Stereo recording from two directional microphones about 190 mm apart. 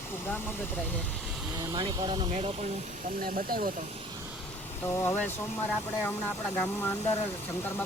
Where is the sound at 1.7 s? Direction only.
25° right (ahead or behind).